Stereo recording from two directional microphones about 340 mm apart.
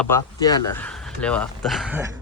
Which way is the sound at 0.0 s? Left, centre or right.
Centre.